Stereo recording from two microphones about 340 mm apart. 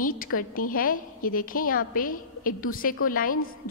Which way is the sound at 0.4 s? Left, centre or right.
Left.